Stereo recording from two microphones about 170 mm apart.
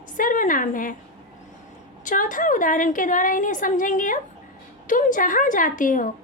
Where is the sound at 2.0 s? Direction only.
50° left (ahead or behind).